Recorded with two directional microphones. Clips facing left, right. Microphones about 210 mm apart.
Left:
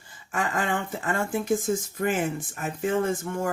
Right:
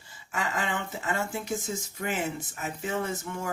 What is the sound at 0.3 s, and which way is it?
Speech, 50° left (ahead or behind).